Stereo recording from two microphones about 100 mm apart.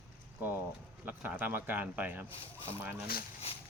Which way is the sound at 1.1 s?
20° right (ahead or behind).